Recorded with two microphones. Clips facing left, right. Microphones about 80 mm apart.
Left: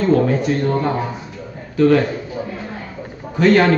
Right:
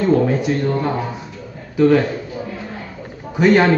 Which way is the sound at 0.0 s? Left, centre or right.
Centre.